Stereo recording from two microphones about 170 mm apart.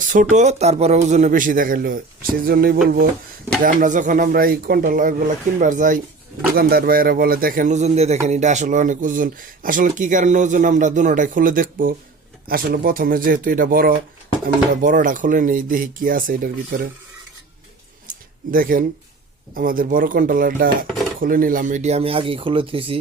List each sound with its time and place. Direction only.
0.1 s speech: 50° right (ahead or behind)
3.6 s speech: 50° right (ahead or behind)
6.6 s speech: 60° right (ahead or behind)
18.1 s a sound: 55° right (ahead or behind)
19.5 s speech: 55° right (ahead or behind)
20.8 s dishes: centre (ahead or behind)
21.2 s speech: 55° right (ahead or behind); by 23.0 s 30° right (ahead or behind)